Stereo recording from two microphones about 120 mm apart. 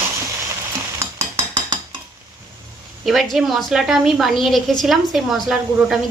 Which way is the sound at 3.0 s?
Centre (ahead or behind).